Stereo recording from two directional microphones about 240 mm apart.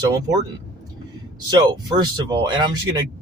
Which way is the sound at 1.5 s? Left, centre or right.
Centre.